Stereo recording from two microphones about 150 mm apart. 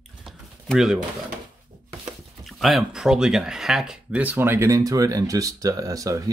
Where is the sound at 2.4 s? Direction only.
Centre (ahead or behind).